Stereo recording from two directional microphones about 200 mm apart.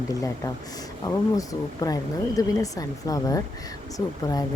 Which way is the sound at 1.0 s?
15° left (ahead or behind).